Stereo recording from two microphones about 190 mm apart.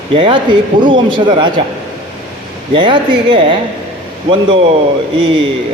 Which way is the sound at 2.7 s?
25° right (ahead or behind).